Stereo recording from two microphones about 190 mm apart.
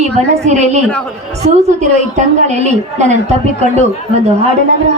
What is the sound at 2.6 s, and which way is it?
Speech, 35° right (ahead or behind).